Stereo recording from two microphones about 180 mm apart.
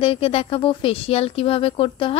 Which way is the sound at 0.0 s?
30° left (ahead or behind).